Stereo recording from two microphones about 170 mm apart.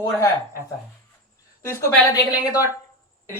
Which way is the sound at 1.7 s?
15° left (ahead or behind).